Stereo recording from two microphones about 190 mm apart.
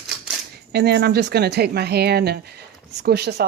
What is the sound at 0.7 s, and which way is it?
Speech, 60° right (ahead or behind).